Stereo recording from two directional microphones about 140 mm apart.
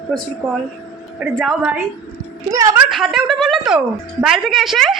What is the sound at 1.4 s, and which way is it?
Speech, 5° right (ahead or behind).